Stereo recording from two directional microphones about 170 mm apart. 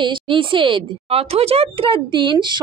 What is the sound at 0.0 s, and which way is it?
A woman's voice, 30° right (ahead or behind).